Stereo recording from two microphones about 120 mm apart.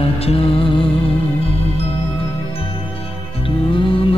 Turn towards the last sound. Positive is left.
turn(degrees=45)  # may be behind; listen again after turning